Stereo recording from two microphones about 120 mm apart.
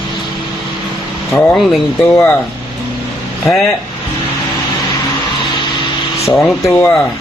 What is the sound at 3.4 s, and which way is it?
Speech, centre (ahead or behind).